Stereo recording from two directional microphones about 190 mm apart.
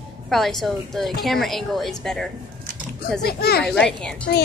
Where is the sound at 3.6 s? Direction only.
5° left (ahead or behind).